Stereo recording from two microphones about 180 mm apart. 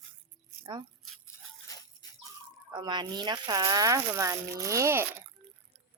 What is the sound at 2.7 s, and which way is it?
Speech, 25° right (ahead or behind).